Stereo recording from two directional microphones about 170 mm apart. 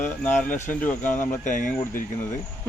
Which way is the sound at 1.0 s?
50° left (ahead or behind).